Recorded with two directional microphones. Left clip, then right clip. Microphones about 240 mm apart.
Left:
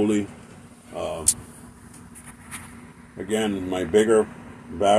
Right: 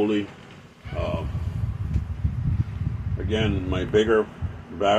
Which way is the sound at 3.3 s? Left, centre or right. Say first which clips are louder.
Left 1 dB; centre.